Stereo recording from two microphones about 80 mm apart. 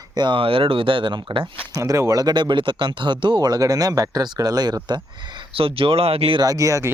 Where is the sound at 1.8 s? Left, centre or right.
Right.